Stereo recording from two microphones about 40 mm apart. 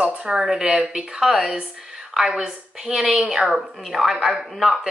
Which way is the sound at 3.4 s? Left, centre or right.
Centre.